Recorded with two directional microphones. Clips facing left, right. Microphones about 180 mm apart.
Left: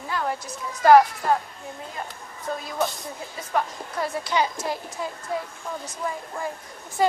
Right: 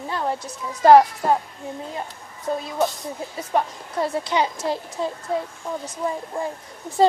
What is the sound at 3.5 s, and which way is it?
A woman's voice, 25° right (ahead or behind).